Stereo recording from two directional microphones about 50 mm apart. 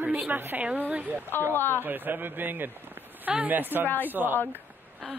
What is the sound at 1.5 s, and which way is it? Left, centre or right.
Speech, left.